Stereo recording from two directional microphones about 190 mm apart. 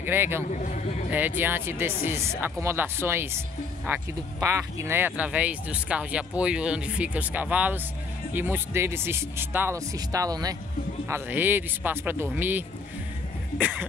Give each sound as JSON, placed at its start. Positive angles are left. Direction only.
{"t": 0.0, "sound": "speech", "side_deg": -10}
{"t": 0.5, "sound": "a sound", "side_deg": 40}
{"t": 1.1, "sound": "speech", "side_deg": -10}